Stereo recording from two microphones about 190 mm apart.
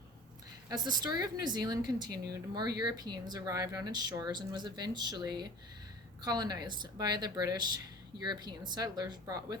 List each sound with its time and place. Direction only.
0.7 s a woman's voice: 20° right (ahead or behind)